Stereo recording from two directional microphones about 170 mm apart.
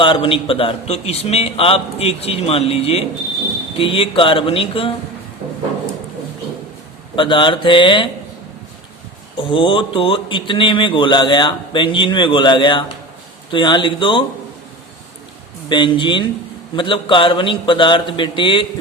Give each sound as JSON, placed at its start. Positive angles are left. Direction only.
{"t": 0.0, "sound": "a man's voice", "side_deg": 30}
{"t": 7.2, "sound": "speech", "side_deg": 30}
{"t": 9.4, "sound": "speech", "side_deg": 30}
{"t": 15.7, "sound": "speech", "side_deg": 30}